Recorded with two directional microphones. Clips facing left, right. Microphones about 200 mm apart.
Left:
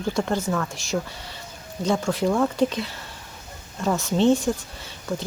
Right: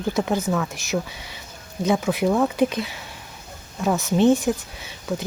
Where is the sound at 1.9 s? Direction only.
5° right (ahead or behind).